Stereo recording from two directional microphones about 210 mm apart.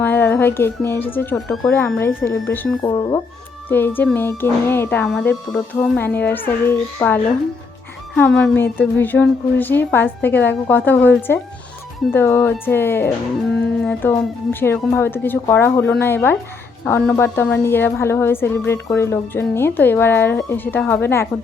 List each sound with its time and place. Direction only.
0.0 s a woman's voice: 10° left (ahead or behind)